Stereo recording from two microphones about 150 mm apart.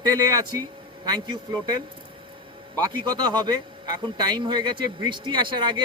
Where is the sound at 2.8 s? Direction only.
25° right (ahead or behind).